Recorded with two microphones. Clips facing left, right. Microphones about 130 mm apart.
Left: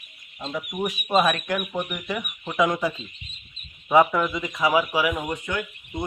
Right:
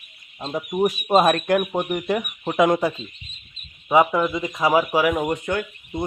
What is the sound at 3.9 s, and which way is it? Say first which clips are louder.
Speech: right 1 dB; 15° right (ahead or behind).